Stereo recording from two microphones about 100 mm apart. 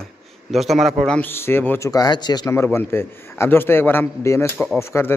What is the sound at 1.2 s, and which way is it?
Speech, 20° left (ahead or behind).